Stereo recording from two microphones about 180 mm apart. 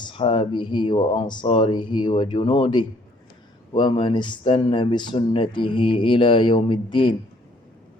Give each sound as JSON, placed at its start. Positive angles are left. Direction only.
{"t": 0.0, "sound": "speech", "side_deg": 25}